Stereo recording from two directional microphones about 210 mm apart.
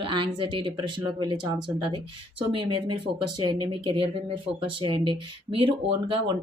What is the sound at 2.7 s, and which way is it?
Speech, 20° right (ahead or behind).